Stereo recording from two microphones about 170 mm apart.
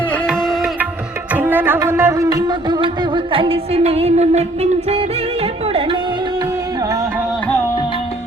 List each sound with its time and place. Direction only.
0.3 s music: centre (ahead or behind)
1.3 s music: 10° right (ahead or behind); by 6.0 s 35° right (ahead or behind)